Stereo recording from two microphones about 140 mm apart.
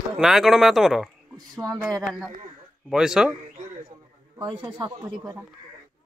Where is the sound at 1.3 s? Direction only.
25° right (ahead or behind).